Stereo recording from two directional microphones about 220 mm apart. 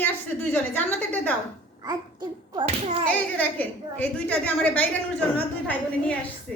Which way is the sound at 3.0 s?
5° left (ahead or behind).